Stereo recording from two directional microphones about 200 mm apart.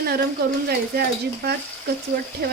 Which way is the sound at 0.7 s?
50° right (ahead or behind).